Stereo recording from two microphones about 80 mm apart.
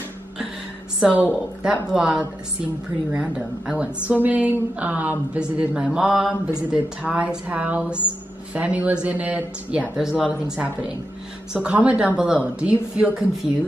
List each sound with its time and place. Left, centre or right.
1.0 s speech: centre